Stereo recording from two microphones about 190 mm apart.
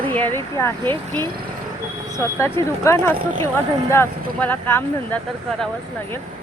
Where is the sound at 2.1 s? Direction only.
15° left (ahead or behind).